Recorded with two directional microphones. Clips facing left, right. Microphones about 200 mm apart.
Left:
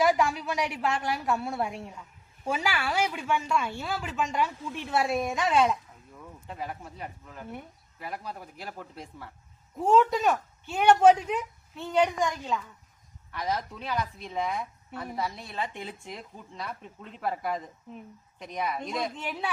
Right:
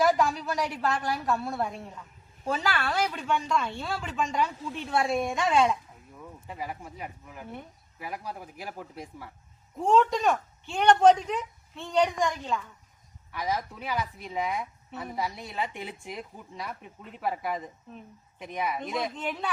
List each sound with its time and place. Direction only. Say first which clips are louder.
0.0 s a woman's voice: even; 5° left (ahead or behind)
9.7 s speech: left 1 dB; 5° left (ahead or behind)
13.3 s a woman's voice: even; 10° right (ahead or behind)
19.1 s speech: right 1 dB; 10° left (ahead or behind)